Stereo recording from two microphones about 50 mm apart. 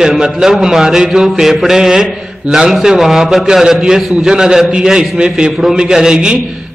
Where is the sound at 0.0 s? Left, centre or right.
Centre.